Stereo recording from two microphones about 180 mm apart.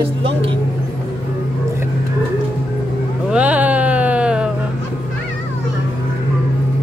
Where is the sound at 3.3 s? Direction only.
5° right (ahead or behind).